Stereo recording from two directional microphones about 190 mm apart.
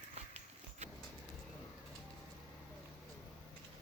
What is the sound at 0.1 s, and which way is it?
Horse, 35° right (ahead or behind).